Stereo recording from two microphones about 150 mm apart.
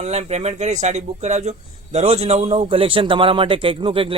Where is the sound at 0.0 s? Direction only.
45° right (ahead or behind).